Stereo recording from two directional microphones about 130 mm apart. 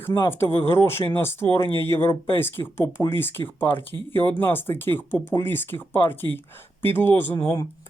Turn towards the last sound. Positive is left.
turn(degrees=25)  # may be behind; listen again after turning